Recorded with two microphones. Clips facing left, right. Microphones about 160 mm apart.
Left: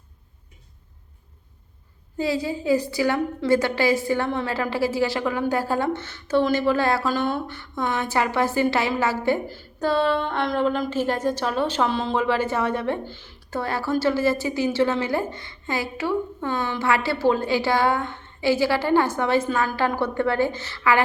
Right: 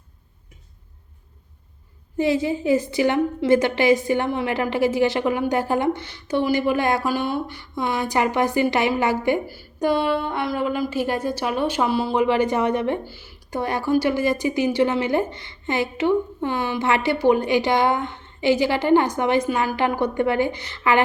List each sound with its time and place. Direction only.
2.1 s a woman's voice: 20° right (ahead or behind)